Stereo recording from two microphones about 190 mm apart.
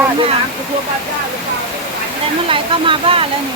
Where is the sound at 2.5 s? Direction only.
25° right (ahead or behind).